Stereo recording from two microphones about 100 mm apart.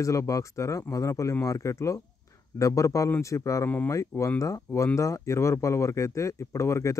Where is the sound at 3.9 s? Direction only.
30° left (ahead or behind).